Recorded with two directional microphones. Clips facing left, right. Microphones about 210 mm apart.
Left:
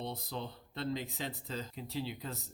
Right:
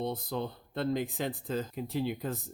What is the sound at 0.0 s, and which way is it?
A man's voice, 50° right (ahead or behind).